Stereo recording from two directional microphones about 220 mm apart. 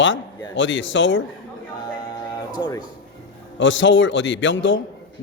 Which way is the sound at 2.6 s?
20° left (ahead or behind).